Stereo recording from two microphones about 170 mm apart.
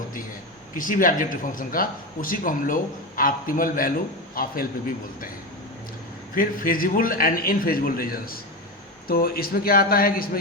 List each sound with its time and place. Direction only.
0.8 s a man's voice: 55° left (ahead or behind)
6.3 s a man's voice: 55° left (ahead or behind)